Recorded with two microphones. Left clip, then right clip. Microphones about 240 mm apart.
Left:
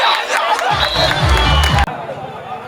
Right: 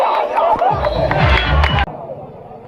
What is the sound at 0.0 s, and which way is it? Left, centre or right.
Music, left.